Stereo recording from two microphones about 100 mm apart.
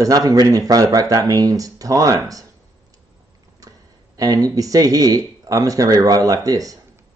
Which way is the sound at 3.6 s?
35° right (ahead or behind).